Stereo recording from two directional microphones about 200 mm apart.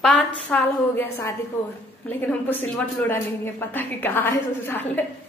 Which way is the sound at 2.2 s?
10° left (ahead or behind).